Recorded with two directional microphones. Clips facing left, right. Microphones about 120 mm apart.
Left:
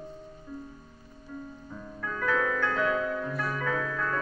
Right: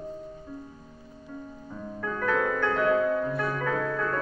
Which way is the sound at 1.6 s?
15° right (ahead or behind).